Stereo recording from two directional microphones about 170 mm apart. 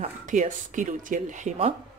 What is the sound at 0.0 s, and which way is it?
Speech, 45° right (ahead or behind).